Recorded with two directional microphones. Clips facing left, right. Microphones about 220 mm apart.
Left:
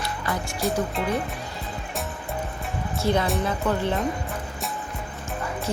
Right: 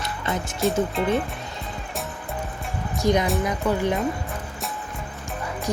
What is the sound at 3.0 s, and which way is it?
Music, 15° right (ahead or behind).